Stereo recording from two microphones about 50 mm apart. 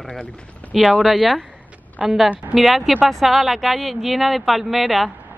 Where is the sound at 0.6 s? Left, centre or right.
Left.